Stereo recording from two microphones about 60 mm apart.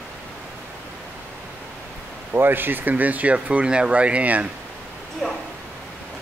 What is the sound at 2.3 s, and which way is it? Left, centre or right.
Speech, right.